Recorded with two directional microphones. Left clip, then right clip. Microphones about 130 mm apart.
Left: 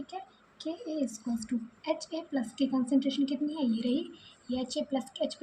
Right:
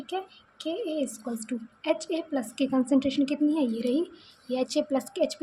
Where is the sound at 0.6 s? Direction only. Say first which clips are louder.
Right 5 dB; 45° right (ahead or behind).